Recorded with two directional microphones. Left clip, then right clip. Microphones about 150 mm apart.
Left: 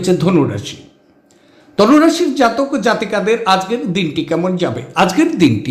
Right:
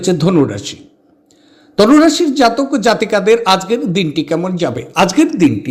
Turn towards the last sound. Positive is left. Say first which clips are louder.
# even
turn(degrees=0)  # may be behind; listen again after turning